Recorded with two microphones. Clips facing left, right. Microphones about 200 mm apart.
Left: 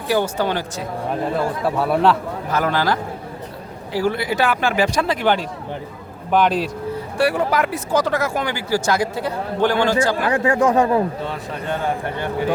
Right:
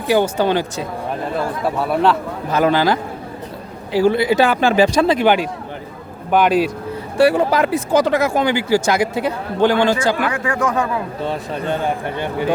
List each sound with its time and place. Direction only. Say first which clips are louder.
0.1 s speech: right 4 dB; 20° right (ahead or behind)
1.6 s a man's voice: right 1 dB; 5° left (ahead or behind)
2.5 s speech: right 5 dB; 20° right (ahead or behind)
5.2 s speech: right 4 dB; 15° right (ahead or behind)
7.2 s speech: right 5 dB; 30° right (ahead or behind)
10.2 s speech: left 3 dB; 35° left (ahead or behind)
11.3 s speech: right 4 dB; 25° right (ahead or behind)